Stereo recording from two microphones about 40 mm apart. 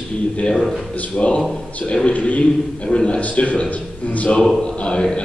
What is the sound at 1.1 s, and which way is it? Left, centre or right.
Speech, left.